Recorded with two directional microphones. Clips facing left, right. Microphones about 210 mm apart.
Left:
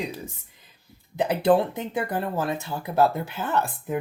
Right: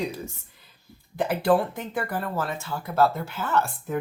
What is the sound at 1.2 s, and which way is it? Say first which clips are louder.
Speech: left 2 dB; 20° left (ahead or behind).